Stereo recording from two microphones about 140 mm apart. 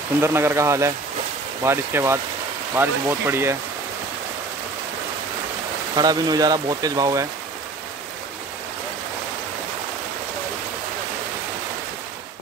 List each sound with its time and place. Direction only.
0.2 s speech: 15° right (ahead or behind)
5.9 s speech: 30° right (ahead or behind)